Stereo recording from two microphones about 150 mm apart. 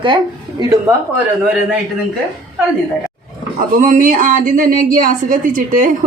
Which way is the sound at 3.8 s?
60° right (ahead or behind).